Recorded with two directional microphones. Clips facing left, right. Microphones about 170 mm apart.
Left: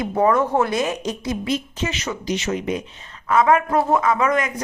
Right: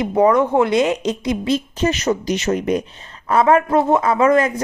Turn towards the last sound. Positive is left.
turn(degrees=-30)  # may be behind; listen again after turning